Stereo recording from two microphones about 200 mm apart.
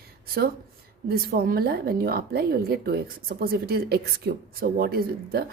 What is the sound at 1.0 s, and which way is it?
Speech, 50° right (ahead or behind).